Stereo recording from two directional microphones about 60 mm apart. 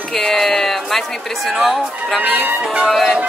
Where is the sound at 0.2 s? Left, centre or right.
Centre.